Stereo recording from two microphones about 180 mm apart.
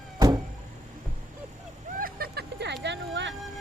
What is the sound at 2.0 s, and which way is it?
Vehicle, 60° right (ahead or behind).